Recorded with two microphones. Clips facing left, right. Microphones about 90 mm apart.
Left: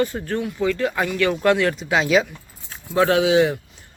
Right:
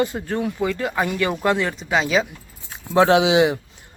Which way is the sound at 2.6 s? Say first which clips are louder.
Right 3 dB; 25° right (ahead or behind).